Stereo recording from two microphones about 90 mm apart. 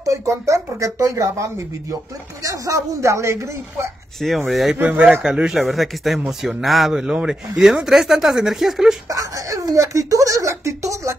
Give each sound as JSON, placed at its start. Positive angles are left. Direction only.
{"t": 0.0, "sound": "speech", "side_deg": -35}
{"t": 4.5, "sound": "speech", "side_deg": 0}
{"t": 4.7, "sound": "a man's voice", "side_deg": -10}
{"t": 9.1, "sound": "speech", "side_deg": -40}